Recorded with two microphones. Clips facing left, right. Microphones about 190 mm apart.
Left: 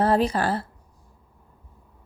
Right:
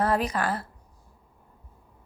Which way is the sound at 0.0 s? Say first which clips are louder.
Left 4 dB; 30° left (ahead or behind).